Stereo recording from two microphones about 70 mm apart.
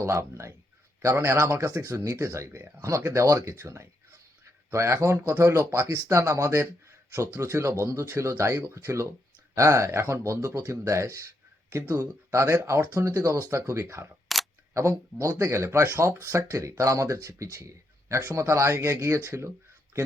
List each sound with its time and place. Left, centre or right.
0.0 s speech: right
2.8 s speech: right
13.8 s speech: right
14.3 s camera: centre
14.7 s speech: right